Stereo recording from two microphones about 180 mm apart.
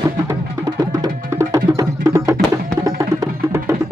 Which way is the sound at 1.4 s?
20° right (ahead or behind).